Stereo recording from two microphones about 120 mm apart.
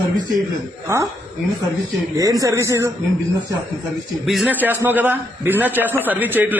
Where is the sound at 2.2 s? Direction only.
25° right (ahead or behind).